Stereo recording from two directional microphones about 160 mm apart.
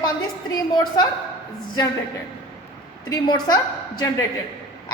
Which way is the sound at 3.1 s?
25° left (ahead or behind).